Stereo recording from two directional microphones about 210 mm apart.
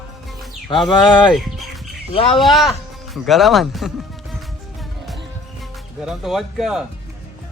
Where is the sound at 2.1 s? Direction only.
25° left (ahead or behind).